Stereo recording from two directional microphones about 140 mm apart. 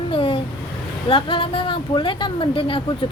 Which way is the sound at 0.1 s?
40° left (ahead or behind).